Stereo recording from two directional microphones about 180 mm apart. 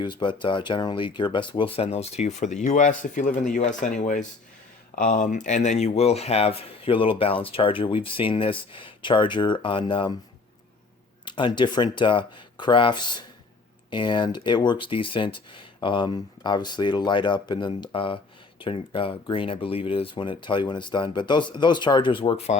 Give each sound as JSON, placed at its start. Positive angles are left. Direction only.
{"t": 0.0, "sound": "speech", "side_deg": 25}
{"t": 11.3, "sound": "speech", "side_deg": 25}